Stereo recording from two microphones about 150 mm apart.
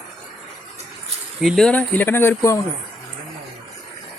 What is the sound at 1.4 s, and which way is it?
Speech, centre (ahead or behind).